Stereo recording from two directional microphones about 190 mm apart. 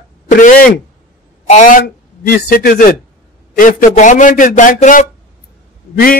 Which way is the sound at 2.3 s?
50° left (ahead or behind).